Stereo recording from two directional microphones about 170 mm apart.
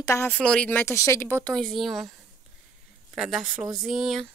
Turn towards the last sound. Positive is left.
turn(degrees=0)  # may be behind; listen again after turning